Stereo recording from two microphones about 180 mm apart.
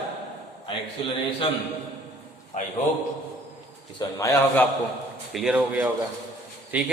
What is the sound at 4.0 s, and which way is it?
Speech, 20° left (ahead or behind).